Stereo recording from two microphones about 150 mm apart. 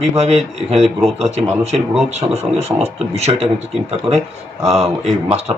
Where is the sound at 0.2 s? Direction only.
40° right (ahead or behind).